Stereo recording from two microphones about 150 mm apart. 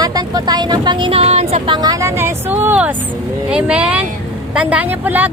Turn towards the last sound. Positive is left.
turn(degrees=-10)  # may be behind; listen again after turning